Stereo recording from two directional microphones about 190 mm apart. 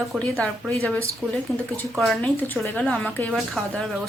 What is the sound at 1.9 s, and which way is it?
A woman's voice, centre (ahead or behind).